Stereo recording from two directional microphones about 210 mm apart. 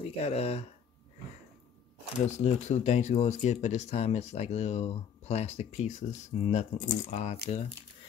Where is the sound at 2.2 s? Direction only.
35° left (ahead or behind).